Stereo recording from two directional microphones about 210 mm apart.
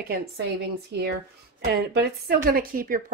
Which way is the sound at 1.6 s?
50° right (ahead or behind).